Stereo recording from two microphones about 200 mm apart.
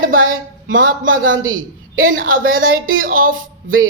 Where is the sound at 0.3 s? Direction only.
45° right (ahead or behind).